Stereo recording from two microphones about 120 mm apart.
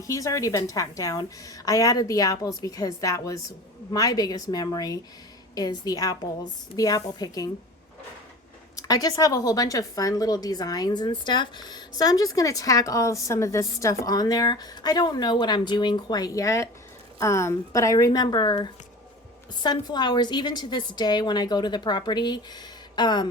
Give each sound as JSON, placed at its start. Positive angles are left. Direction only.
{"t": 0.1, "sound": "a woman's voice", "side_deg": 30}
{"t": 8.9, "sound": "a woman's voice", "side_deg": 30}